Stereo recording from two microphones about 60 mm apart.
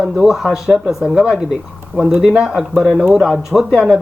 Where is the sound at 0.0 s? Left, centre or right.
Centre.